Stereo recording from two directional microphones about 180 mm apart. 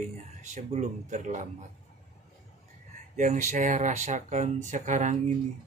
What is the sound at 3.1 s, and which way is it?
Speech, 40° right (ahead or behind).